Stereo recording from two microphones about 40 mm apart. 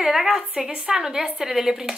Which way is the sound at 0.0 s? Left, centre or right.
Centre.